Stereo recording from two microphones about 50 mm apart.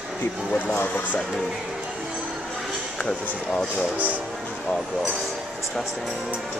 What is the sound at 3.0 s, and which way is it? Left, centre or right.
Speech, centre.